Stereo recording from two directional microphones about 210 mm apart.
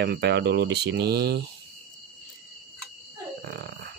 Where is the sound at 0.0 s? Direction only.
50° right (ahead or behind).